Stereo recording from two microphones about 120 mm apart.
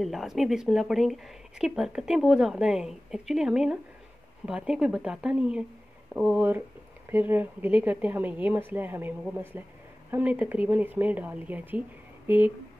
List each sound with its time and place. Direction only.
0.0 s a woman's voice: centre (ahead or behind)
10.1 s a woman's voice: 10° right (ahead or behind)